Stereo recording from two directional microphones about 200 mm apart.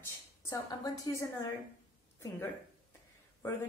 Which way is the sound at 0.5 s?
15° left (ahead or behind).